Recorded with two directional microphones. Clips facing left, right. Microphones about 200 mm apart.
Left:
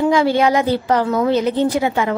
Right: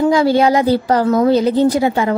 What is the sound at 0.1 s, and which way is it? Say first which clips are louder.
A woman's voice: right 2 dB; 40° right (ahead or behind).